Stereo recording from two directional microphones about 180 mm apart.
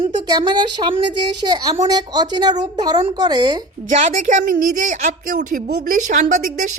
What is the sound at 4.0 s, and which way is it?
A woman's voice, 45° right (ahead or behind).